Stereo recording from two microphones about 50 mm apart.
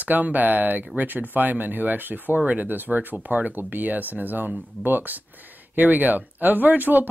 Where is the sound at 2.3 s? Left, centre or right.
Right.